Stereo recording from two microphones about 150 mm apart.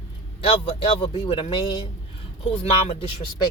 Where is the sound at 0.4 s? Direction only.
40° left (ahead or behind).